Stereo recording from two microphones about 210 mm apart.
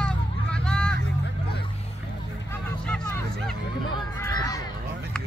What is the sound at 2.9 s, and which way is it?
Vehicle, 10° left (ahead or behind).